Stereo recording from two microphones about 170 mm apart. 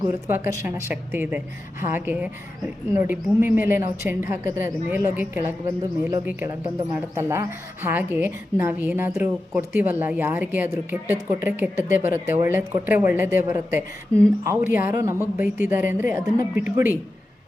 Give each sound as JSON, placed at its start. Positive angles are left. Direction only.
{"t": 0.1, "sound": "a woman's voice", "side_deg": -15}